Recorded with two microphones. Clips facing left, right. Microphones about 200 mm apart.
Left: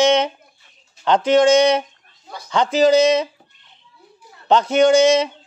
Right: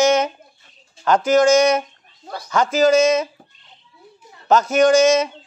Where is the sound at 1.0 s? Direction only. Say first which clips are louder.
Left 1 dB; 30° left (ahead or behind).